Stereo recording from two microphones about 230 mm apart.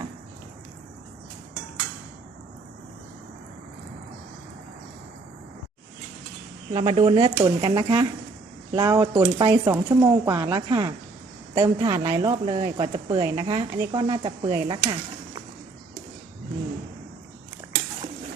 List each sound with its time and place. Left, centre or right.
6.7 s a woman's voice: right